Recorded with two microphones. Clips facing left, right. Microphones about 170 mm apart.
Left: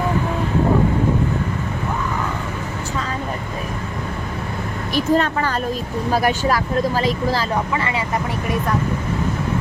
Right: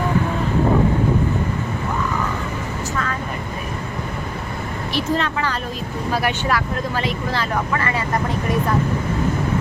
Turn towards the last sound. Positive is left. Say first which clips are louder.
# even
turn(degrees=15)  # may be behind; listen again after turning